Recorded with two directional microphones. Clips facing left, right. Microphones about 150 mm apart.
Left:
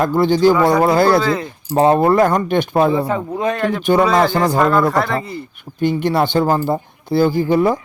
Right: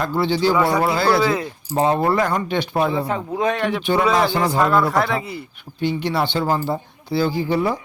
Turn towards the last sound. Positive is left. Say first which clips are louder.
# left 5 dB
turn(degrees=50)  # may be behind; listen again after turning